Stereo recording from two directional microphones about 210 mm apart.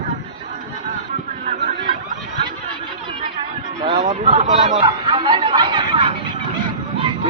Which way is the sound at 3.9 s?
30° right (ahead or behind).